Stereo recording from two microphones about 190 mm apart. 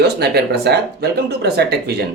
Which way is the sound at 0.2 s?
60° right (ahead or behind).